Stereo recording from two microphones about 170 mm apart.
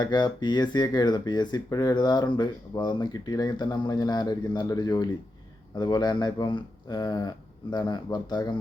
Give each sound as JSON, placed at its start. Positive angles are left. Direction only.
{"t": 0.0, "sound": "speech", "side_deg": 25}